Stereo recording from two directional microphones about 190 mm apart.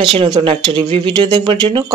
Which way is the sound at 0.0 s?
25° right (ahead or behind).